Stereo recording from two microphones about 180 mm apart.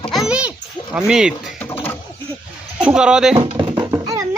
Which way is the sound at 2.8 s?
5° right (ahead or behind).